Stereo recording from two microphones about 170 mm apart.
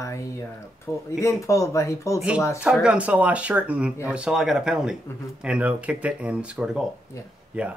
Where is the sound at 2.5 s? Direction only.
5° right (ahead or behind).